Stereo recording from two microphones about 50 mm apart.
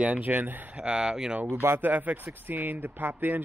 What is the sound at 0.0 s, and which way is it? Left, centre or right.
Speech, right.